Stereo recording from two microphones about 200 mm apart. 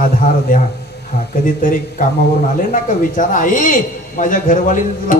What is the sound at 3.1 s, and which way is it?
A man's voice, 40° left (ahead or behind).